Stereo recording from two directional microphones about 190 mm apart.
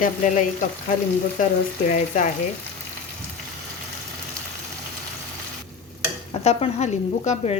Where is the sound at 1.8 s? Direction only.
40° left (ahead or behind).